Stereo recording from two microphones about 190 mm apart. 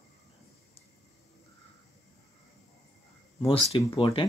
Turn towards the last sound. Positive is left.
turn(degrees=30)  # may be behind; listen again after turning